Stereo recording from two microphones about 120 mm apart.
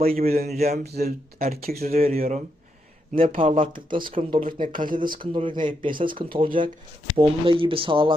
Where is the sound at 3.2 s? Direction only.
55° right (ahead or behind).